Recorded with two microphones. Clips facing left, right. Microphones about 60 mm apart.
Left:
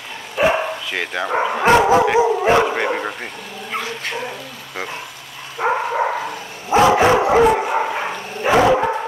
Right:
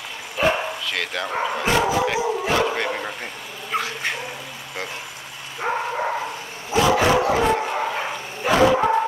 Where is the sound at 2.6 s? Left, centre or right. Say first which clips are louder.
Left 4 dB; centre.